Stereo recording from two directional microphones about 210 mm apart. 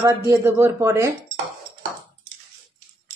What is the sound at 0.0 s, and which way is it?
Speech, 15° right (ahead or behind).